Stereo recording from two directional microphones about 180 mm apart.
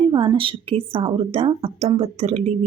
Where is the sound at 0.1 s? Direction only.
25° right (ahead or behind).